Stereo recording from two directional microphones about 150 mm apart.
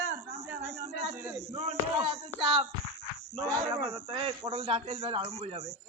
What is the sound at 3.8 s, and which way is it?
A man's voice, 40° right (ahead or behind).